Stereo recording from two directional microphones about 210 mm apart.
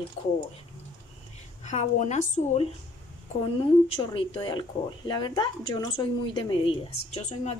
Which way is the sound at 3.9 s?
25° left (ahead or behind).